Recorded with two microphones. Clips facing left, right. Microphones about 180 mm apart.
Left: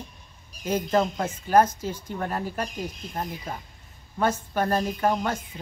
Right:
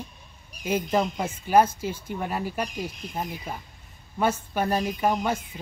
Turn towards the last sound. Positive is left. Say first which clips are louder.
# even
turn(degrees=-10)  # may be behind; listen again after turning